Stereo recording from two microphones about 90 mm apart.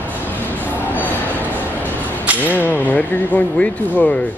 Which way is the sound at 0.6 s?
20° left (ahead or behind).